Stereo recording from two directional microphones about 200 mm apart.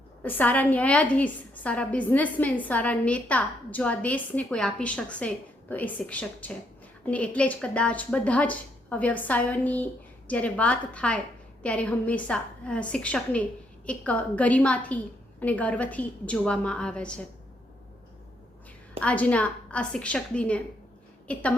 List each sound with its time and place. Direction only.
0.2 s a woman's voice: 10° left (ahead or behind)
18.9 s a woman's voice: 5° left (ahead or behind)